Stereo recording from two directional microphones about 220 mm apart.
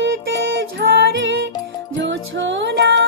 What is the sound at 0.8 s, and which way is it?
Music, 55° right (ahead or behind).